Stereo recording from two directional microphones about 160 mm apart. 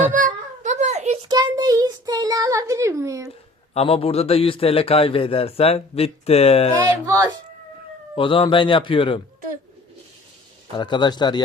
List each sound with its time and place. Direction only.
0.1 s a sound: 55° right (ahead or behind)
1.3 s child singing: 25° right (ahead or behind)
3.8 s a man's voice: 35° left (ahead or behind)
8.1 s a man's voice: 30° left (ahead or behind)
10.8 s speech: 30° left (ahead or behind)